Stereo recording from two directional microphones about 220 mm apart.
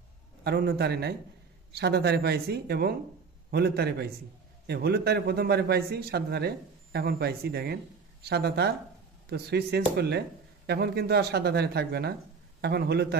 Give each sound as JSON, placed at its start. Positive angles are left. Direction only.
{"t": 0.4, "sound": "a man's voice", "side_deg": -45}